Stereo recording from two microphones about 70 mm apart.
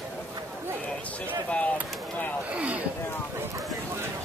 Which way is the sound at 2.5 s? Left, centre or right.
Centre.